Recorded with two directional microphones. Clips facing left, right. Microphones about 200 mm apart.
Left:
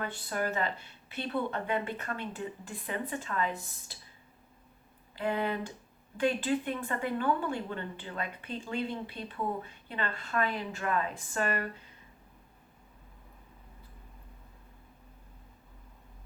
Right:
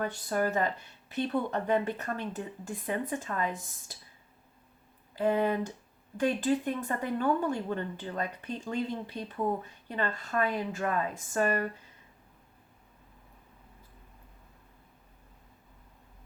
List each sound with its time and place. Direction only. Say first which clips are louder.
0.0 s speech: right 4 dB; 45° right (ahead or behind)
5.1 s speech: right 4 dB; 40° right (ahead or behind)